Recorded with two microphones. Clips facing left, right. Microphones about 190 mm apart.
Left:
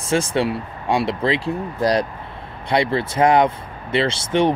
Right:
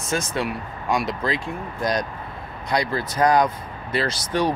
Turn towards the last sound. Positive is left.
turn(degrees=25)  # may be behind; listen again after turning